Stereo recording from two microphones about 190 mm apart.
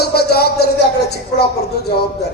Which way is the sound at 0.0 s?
55° left (ahead or behind).